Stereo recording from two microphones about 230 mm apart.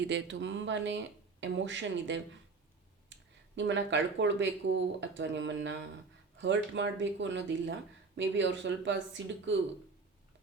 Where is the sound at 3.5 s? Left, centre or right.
Right.